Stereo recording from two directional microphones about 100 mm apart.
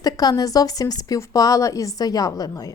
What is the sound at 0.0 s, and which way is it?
A woman's voice, 40° left (ahead or behind).